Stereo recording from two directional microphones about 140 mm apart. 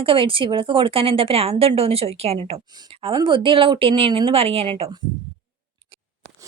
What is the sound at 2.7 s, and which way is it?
Speech, 35° right (ahead or behind).